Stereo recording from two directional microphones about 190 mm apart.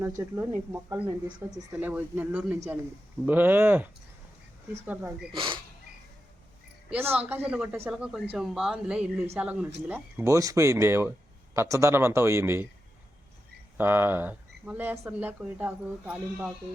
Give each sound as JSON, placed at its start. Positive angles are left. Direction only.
{"t": 0.2, "sound": "speech", "side_deg": -15}
{"t": 5.3, "sound": "speech", "side_deg": -25}
{"t": 6.9, "sound": "a man's voice", "side_deg": -10}
{"t": 13.7, "sound": "speech", "side_deg": -10}